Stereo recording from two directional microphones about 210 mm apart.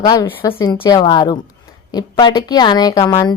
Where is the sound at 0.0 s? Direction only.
20° left (ahead or behind).